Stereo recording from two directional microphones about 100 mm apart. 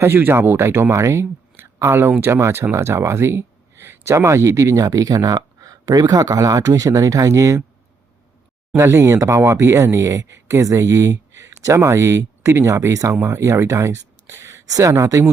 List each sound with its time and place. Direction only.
0.0 s speech: 20° right (ahead or behind)
8.7 s speech: 25° right (ahead or behind)